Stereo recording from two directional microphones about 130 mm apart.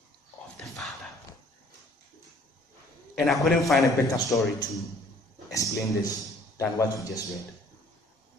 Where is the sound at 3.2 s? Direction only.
Centre (ahead or behind).